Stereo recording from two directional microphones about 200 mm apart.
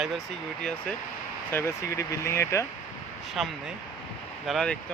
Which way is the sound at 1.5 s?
15° left (ahead or behind).